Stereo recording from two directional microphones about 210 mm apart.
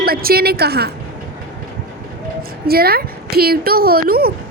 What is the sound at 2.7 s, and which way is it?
A woman's voice, 45° right (ahead or behind).